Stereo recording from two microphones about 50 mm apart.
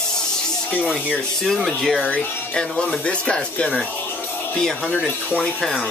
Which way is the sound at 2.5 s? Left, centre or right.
Centre.